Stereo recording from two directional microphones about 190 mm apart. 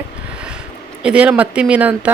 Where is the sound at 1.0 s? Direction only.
5° right (ahead or behind).